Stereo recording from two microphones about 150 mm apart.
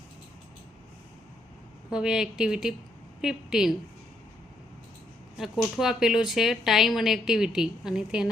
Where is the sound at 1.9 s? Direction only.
5° right (ahead or behind).